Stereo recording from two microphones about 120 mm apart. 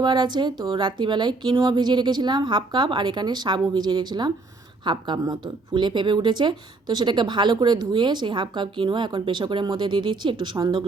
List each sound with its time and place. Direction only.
0.0 s speech: 35° right (ahead or behind)